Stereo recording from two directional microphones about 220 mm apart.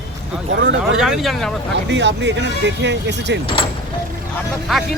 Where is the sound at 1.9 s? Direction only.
55° right (ahead or behind).